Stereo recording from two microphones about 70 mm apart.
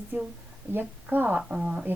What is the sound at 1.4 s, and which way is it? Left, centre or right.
Speech, centre.